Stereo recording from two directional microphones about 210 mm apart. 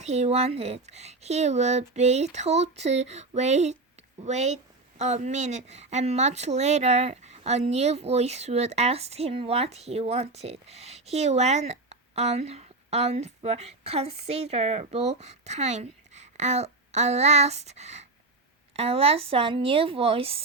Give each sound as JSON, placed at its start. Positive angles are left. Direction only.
{"t": 0.0, "sound": "a woman's voice", "side_deg": -30}